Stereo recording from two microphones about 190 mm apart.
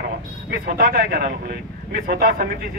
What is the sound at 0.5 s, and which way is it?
A man's voice, 50° right (ahead or behind).